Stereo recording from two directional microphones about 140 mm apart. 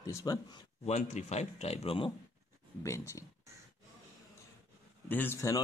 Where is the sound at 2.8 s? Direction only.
20° left (ahead or behind).